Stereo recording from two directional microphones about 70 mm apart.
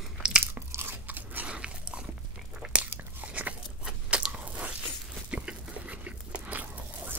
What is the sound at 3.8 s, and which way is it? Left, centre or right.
Crunch, centre.